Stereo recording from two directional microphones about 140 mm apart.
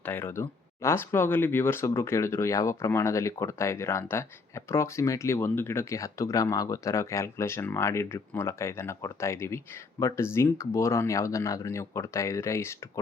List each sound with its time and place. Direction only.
0.0 s speech: 15° left (ahead or behind)